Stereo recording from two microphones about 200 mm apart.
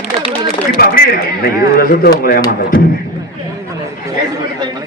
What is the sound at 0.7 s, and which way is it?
Speech, 50° left (ahead or behind).